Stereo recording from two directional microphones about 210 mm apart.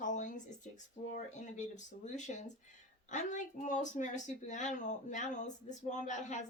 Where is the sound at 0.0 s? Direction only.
35° left (ahead or behind).